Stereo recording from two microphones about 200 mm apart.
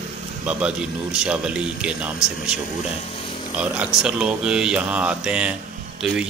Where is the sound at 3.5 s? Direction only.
5° right (ahead or behind).